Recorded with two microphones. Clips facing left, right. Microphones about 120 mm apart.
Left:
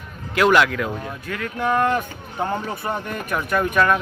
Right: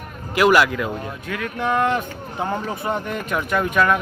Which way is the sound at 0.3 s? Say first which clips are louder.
Right 1 dB; 5° right (ahead or behind).